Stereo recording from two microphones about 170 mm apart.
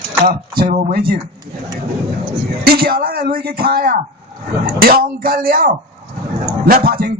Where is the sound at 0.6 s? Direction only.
65° right (ahead or behind).